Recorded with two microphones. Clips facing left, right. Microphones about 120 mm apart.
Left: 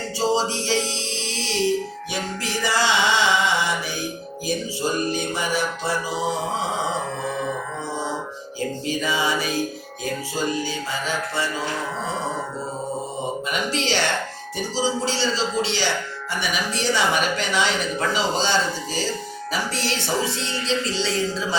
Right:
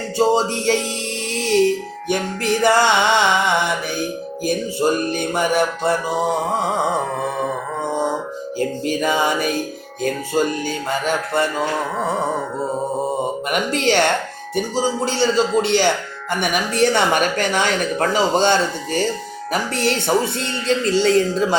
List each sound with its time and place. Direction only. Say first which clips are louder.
0.2 s music: right 5 dB; 55° right (ahead or behind)
8.5 s music: right 5 dB; 55° right (ahead or behind)
13.5 s music: right 6 dB; 55° right (ahead or behind)